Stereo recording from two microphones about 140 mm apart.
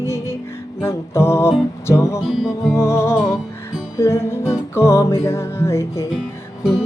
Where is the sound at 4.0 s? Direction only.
20° left (ahead or behind).